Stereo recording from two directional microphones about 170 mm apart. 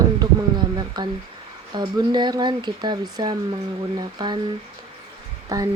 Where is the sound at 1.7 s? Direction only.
25° right (ahead or behind).